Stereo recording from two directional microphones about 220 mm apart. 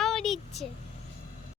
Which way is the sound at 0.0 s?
Centre (ahead or behind).